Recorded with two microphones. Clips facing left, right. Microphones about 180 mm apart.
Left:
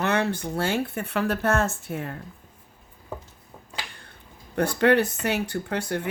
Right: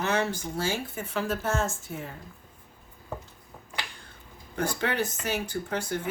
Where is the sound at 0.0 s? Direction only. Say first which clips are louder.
Left 3 dB; 60° left (ahead or behind).